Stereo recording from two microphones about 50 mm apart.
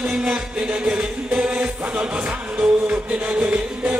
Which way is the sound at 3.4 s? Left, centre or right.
Right.